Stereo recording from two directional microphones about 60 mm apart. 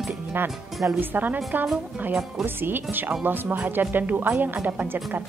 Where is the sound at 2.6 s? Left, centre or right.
Right.